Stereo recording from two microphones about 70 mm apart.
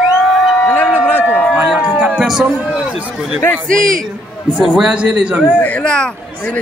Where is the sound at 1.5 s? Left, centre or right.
Centre.